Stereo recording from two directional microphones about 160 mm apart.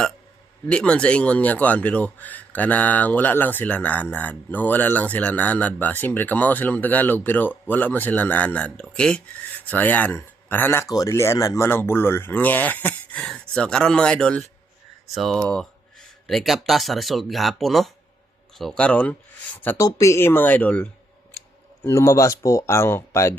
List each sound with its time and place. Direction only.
0.7 s speech: 5° left (ahead or behind)
19.6 s speech: 20° left (ahead or behind)